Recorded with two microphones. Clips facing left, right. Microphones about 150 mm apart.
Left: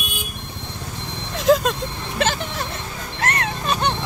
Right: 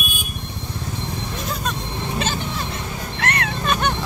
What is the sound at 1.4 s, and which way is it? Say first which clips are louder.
Vehicle: left 14 dB; 90° left.